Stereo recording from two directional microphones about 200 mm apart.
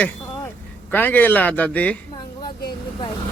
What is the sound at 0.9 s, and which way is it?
A man's voice, 10° left (ahead or behind).